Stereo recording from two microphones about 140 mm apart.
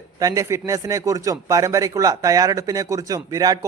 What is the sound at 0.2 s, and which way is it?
Speech, 25° right (ahead or behind).